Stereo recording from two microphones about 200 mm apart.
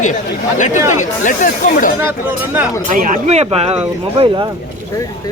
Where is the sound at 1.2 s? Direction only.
40° left (ahead or behind).